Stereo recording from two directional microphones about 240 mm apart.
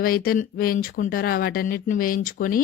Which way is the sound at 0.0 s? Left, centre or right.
Left.